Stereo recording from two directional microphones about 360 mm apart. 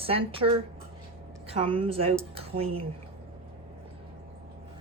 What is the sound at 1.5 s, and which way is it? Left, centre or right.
Speech, centre.